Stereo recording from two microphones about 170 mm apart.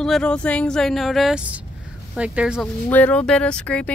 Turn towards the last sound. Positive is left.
turn(degrees=5)  # may be behind; listen again after turning